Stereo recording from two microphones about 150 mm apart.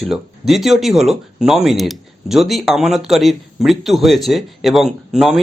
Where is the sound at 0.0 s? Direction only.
Centre (ahead or behind).